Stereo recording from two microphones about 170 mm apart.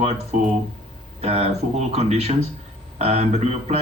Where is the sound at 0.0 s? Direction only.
40° right (ahead or behind).